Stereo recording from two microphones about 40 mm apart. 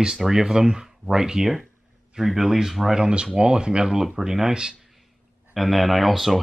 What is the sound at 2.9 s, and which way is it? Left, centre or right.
Speech, right.